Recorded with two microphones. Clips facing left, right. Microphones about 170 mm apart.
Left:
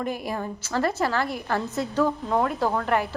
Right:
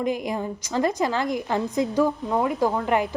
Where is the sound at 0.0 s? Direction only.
15° right (ahead or behind).